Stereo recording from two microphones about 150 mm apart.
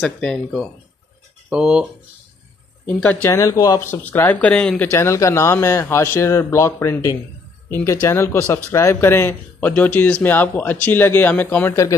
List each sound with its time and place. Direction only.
0.0 s speech: 5° left (ahead or behind)
1.5 s speech: 5° right (ahead or behind)
2.9 s speech: 10° left (ahead or behind)
4.8 s a man's voice: 20° left (ahead or behind)